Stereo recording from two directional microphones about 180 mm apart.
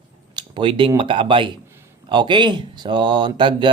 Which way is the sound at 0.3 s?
25° right (ahead or behind).